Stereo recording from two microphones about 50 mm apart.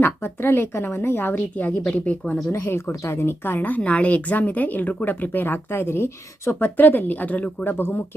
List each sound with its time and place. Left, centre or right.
0.0 s a woman's voice: left
1.8 s speech: left
2.5 s a woman's voice: left
3.0 s a woman's voice: left
3.8 s speech: left
6.7 s speech: left
7.6 s a woman's voice: left